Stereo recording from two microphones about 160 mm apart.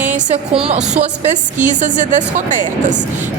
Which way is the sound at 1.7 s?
50° right (ahead or behind).